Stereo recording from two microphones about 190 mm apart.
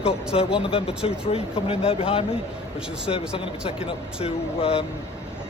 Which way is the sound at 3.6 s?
30° left (ahead or behind).